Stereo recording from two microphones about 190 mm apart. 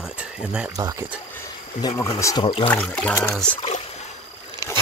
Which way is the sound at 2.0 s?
20° left (ahead or behind).